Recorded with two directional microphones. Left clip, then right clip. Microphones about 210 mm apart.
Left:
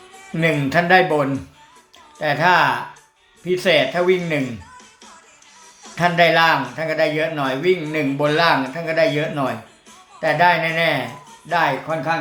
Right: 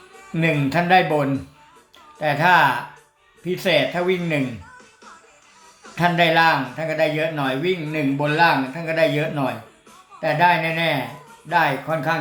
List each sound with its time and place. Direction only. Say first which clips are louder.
0.3 s a man's voice: left 2 dB; 5° left (ahead or behind)
5.9 s a man's voice: left 2 dB; centre (ahead or behind)